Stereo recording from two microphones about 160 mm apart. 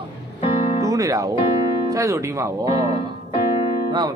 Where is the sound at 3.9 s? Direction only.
25° right (ahead or behind).